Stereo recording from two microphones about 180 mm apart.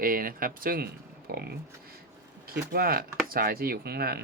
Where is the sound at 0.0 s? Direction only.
50° right (ahead or behind).